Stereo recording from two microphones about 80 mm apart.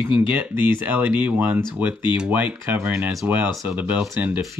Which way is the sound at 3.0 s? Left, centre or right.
Right.